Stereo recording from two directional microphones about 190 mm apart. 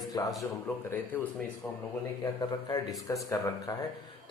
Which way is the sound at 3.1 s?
20° left (ahead or behind).